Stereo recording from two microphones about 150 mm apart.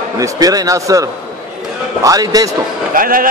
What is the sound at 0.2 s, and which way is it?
A man's voice, 25° right (ahead or behind).